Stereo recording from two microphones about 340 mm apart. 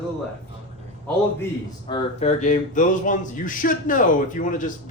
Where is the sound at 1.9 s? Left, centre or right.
Left.